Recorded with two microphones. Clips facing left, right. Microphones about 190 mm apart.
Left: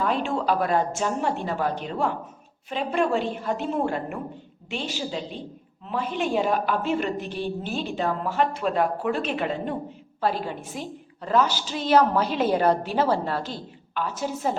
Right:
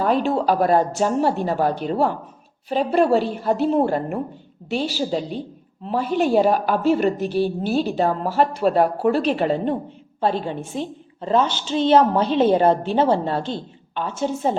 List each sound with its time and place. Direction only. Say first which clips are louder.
0.0 s a woman's voice: right 6 dB; 40° right (ahead or behind)